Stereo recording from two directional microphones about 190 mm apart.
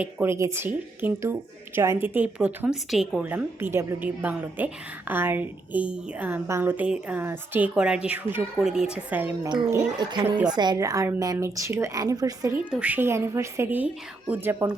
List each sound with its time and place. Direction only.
0.0 s a woman's voice: 10° right (ahead or behind)
10.2 s a woman's voice: 10° right (ahead or behind)
10.5 s a woman's voice: 20° right (ahead or behind)